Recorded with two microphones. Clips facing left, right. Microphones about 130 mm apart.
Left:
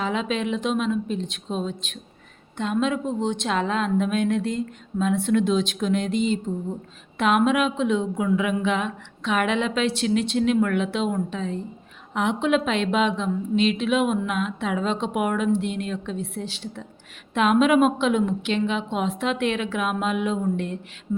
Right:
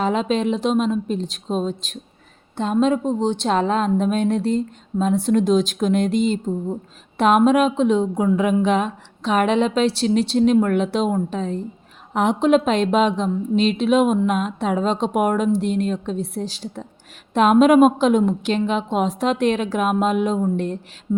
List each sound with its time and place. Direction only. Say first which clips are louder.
0.0 s a woman's voice: right 5 dB; 40° right (ahead or behind)